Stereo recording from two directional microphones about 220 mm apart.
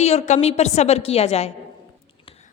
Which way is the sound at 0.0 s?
30° left (ahead or behind).